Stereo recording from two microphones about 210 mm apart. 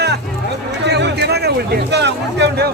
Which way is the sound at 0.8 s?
55° right (ahead or behind).